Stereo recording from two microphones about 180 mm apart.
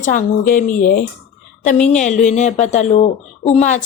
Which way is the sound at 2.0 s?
40° left (ahead or behind).